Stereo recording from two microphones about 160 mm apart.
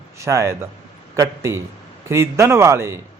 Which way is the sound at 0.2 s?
20° right (ahead or behind).